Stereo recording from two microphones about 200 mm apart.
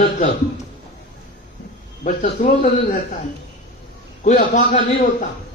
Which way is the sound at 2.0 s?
40° left (ahead or behind).